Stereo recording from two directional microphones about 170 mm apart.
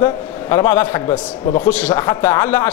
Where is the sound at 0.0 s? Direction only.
15° left (ahead or behind).